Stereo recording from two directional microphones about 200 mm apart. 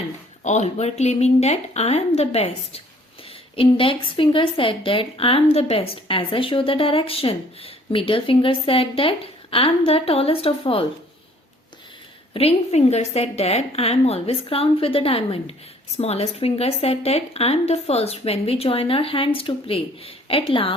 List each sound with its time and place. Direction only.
0.4 s a woman's voice: 35° left (ahead or behind)
12.3 s a woman's voice: 30° left (ahead or behind)